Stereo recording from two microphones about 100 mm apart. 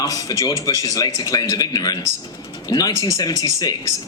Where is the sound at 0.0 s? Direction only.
40° left (ahead or behind).